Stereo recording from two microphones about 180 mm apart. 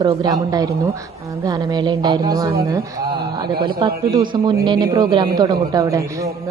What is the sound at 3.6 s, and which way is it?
A woman's voice, 25° right (ahead or behind).